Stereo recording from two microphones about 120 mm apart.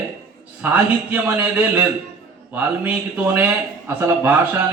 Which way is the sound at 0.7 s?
15° right (ahead or behind).